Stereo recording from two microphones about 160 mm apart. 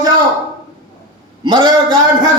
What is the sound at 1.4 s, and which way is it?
Speech, 30° right (ahead or behind).